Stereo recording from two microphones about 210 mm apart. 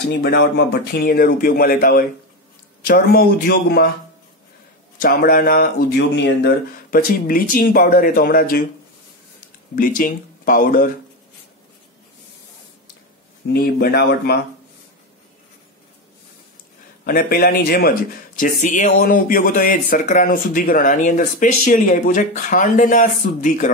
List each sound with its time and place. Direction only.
0.2 s speech: 55° left (ahead or behind)
5.0 s speech: 45° left (ahead or behind)
9.8 s speech: 40° left (ahead or behind)
13.5 s speech: 45° left (ahead or behind)
17.0 s speech: 45° left (ahead or behind)